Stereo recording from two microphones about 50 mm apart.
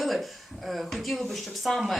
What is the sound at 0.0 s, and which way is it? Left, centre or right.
Speech, centre.